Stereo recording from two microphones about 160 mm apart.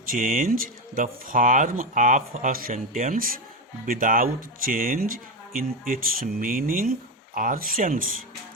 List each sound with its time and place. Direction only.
0.1 s speech: 55° right (ahead or behind)